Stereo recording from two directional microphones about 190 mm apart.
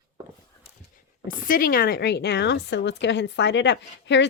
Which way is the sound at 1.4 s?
45° left (ahead or behind).